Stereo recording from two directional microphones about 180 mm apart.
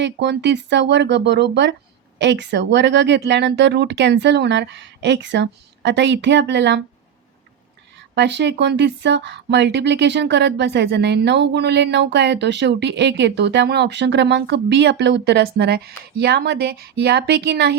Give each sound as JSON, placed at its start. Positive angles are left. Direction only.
{"t": 0.0, "sound": "speech", "side_deg": -70}
{"t": 8.1, "sound": "speech", "side_deg": -75}